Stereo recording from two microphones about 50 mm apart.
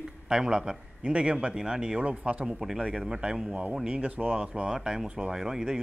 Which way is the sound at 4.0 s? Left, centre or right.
Right.